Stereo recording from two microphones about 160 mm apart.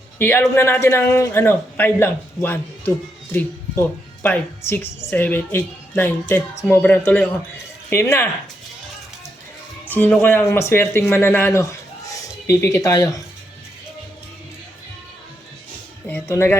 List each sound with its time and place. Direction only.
0.2 s a woman's voice: 15° left (ahead or behind)
9.9 s speech: 10° left (ahead or behind)
16.0 s a woman's voice: 15° left (ahead or behind)